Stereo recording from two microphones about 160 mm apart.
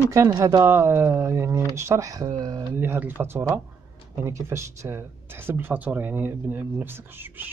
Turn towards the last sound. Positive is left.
turn(degrees=-10)  # may be behind; listen again after turning